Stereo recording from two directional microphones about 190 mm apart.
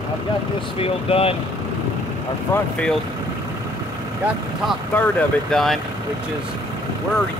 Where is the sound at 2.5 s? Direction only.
5° left (ahead or behind).